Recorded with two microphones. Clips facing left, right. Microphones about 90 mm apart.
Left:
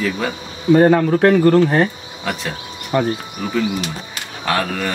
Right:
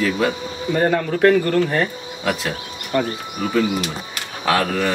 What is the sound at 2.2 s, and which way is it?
Speech, centre (ahead or behind).